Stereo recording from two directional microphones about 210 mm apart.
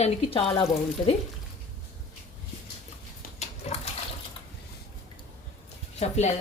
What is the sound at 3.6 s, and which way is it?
Water, 30° left (ahead or behind).